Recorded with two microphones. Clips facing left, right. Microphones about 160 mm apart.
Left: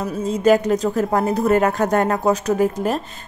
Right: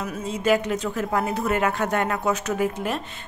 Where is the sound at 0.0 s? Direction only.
35° left (ahead or behind).